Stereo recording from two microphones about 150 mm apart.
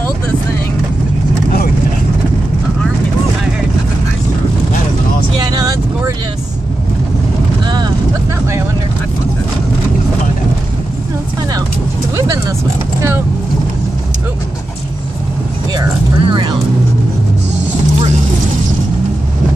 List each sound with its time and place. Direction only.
5.4 s vehicle: 25° right (ahead or behind)
15.7 s vehicle: 25° right (ahead or behind)